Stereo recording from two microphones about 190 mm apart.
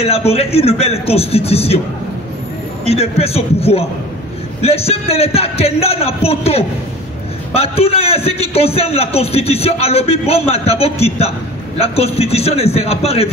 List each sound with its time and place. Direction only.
0.0 s a man's voice: 30° left (ahead or behind)
2.8 s a man's voice: 30° left (ahead or behind)